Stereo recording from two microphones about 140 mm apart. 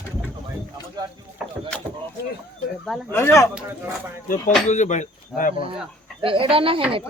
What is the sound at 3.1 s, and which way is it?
Speech, 15° left (ahead or behind).